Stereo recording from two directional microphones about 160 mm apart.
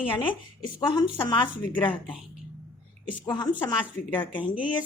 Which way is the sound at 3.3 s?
25° left (ahead or behind).